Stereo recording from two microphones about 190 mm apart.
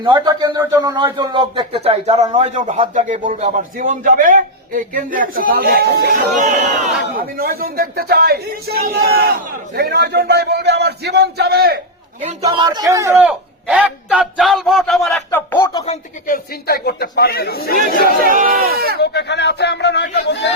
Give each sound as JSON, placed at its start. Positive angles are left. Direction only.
{"t": 0.0, "sound": "a man's voice", "side_deg": -20}
{"t": 12.2, "sound": "a man's voice", "side_deg": -30}
{"t": 15.5, "sound": "speech", "side_deg": 25}
{"t": 16.2, "sound": "a man's voice", "side_deg": 50}
{"t": 18.0, "sound": "a man's voice", "side_deg": -50}
{"t": 18.9, "sound": "a man's voice", "side_deg": 60}